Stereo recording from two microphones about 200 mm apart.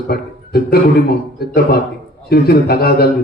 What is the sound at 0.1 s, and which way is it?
A man's voice, 50° left (ahead or behind).